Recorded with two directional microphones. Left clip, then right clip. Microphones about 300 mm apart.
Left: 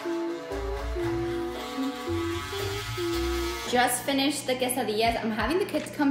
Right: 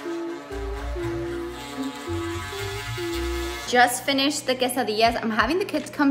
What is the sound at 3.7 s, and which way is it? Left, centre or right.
A woman's voice, centre.